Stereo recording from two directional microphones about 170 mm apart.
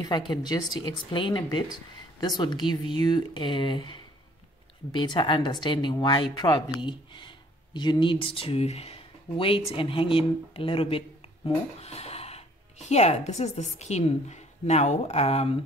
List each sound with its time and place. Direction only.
0.0 s a woman's voice: 25° left (ahead or behind)